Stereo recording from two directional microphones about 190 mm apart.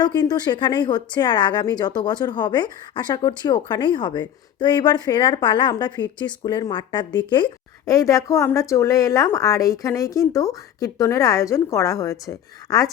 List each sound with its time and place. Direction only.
0.0 s a woman's voice: 20° left (ahead or behind)